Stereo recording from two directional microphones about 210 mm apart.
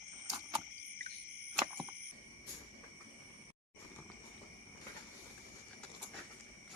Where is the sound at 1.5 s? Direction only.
5° right (ahead or behind).